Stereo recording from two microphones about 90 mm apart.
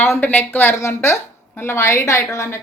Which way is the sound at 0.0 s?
25° left (ahead or behind).